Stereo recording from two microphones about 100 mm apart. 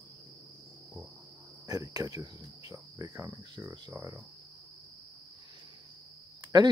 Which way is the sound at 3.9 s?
35° right (ahead or behind).